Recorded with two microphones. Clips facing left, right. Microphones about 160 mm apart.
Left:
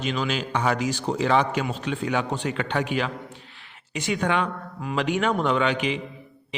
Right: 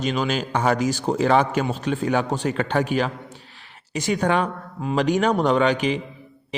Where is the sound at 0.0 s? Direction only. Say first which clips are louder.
Right 3 dB; 40° right (ahead or behind).